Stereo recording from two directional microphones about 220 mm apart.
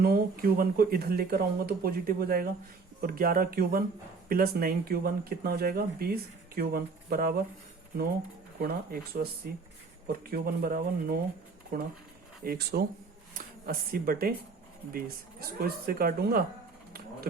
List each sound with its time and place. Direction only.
0.0 s speech: 40° right (ahead or behind)
8.6 s speech: 40° right (ahead or behind)
10.1 s speech: 45° right (ahead or behind)